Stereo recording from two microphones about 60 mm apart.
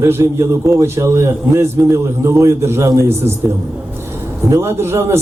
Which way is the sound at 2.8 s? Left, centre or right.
Right.